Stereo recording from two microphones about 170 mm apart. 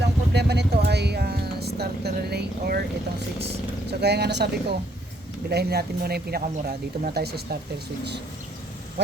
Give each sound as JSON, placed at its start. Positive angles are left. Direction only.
{"t": 0.0, "sound": "music", "side_deg": -80}
{"t": 4.0, "sound": "speech", "side_deg": -75}